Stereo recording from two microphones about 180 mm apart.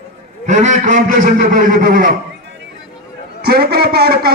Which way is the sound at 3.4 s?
60° right (ahead or behind).